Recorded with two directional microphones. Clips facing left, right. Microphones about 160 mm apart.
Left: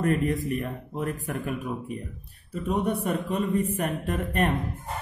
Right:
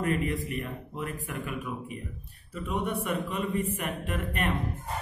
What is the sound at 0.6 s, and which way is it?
Speech, 45° left (ahead or behind).